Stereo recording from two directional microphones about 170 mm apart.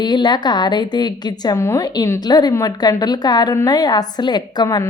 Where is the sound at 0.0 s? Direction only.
25° left (ahead or behind).